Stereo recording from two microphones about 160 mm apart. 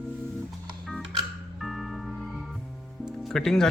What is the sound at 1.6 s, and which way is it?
Music, centre (ahead or behind).